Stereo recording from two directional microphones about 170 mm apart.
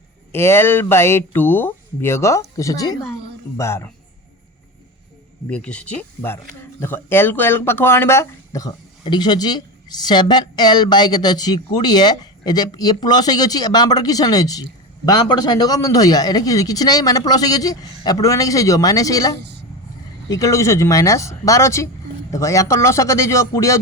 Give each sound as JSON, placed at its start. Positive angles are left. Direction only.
{"t": 0.3, "sound": "speech", "side_deg": 15}
{"t": 5.5, "sound": "speech", "side_deg": 5}